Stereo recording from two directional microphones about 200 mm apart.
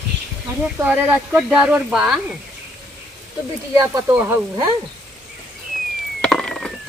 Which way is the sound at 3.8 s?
15° right (ahead or behind).